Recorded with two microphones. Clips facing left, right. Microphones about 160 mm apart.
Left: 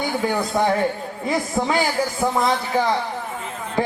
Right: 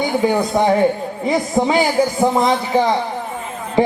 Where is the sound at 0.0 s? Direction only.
20° right (ahead or behind).